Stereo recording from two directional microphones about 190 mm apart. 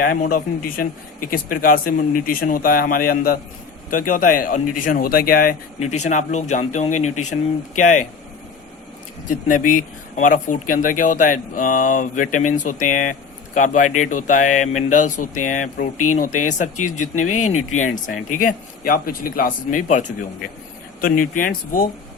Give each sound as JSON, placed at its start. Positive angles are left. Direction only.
{"t": 0.0, "sound": "a man's voice", "side_deg": 50}
{"t": 5.8, "sound": "speech", "side_deg": 40}
{"t": 9.3, "sound": "a man's voice", "side_deg": 45}